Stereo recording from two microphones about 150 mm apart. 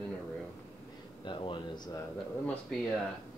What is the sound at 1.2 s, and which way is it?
Speech, 35° left (ahead or behind).